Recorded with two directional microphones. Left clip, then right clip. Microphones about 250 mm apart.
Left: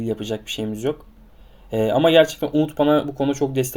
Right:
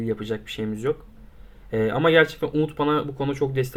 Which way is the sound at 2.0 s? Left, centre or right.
Centre.